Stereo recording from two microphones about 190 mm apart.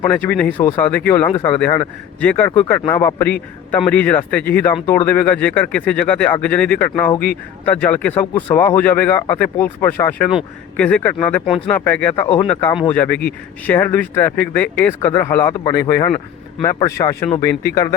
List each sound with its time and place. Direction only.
0.0 s speech: 5° left (ahead or behind)